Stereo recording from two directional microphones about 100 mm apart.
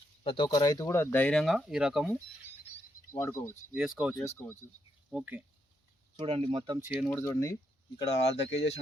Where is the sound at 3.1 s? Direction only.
30° left (ahead or behind).